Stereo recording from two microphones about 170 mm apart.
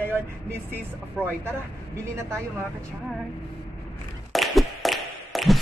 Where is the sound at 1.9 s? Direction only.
15° right (ahead or behind).